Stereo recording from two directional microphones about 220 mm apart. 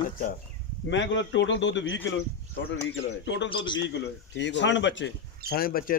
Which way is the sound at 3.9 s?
55° left (ahead or behind).